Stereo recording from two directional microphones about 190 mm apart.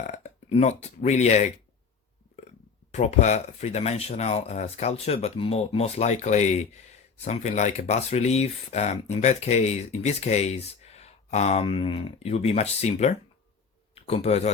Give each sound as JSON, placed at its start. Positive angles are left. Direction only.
{"t": 0.1, "sound": "speech", "side_deg": 35}
{"t": 2.9, "sound": "speech", "side_deg": 35}